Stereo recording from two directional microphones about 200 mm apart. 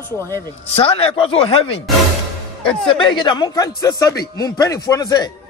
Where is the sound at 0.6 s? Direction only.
30° left (ahead or behind).